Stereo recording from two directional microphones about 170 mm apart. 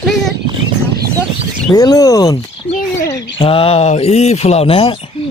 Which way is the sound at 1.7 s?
20° left (ahead or behind).